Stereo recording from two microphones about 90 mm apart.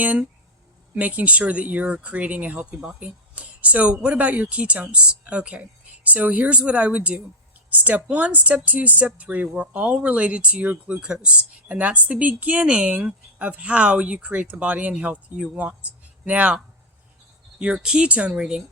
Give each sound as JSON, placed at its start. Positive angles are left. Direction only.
{"t": 0.0, "sound": "speech", "side_deg": -15}
{"t": 17.6, "sound": "speech", "side_deg": -10}